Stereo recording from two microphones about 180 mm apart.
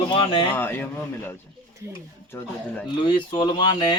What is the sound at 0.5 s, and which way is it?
Speech, 10° left (ahead or behind).